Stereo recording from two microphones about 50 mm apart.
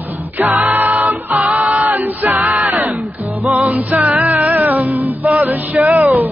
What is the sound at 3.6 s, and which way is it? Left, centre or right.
Music, right.